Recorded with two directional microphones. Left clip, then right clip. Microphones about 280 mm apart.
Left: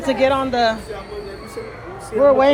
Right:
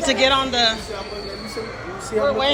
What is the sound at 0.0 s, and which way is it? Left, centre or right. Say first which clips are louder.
Speech: even; centre.